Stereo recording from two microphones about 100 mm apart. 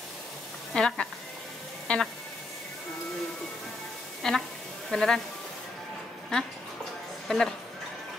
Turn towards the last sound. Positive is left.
turn(degrees=5)  # may be behind; listen again after turning